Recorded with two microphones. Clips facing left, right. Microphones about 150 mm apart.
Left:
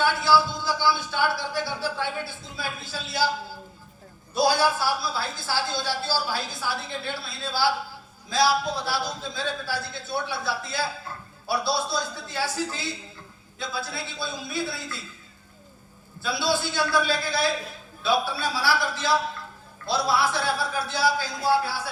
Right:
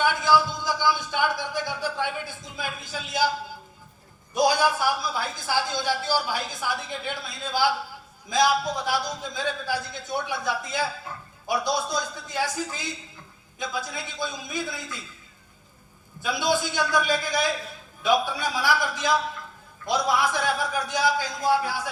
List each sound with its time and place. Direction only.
0.0 s a sound: 15° right (ahead or behind)
4.4 s a woman's voice: 15° right (ahead or behind)
16.2 s a woman's voice: 15° right (ahead or behind)